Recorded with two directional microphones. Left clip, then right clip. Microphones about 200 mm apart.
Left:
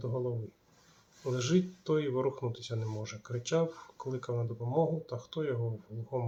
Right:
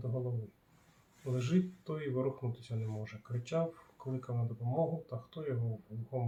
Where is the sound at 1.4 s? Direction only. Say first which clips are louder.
Left 5 dB; 25° left (ahead or behind).